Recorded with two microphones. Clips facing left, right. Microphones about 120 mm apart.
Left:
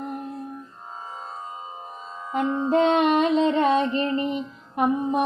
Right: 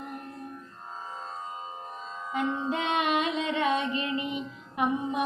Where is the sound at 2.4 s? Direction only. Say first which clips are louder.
Left 9 dB; 35° left (ahead or behind).